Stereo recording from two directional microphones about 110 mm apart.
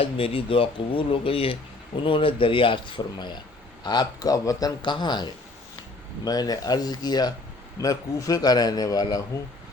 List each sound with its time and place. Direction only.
0.0 s speech: 55° left (ahead or behind)
3.8 s a man's voice: 35° left (ahead or behind)
4.8 s a man's voice: 45° left (ahead or behind)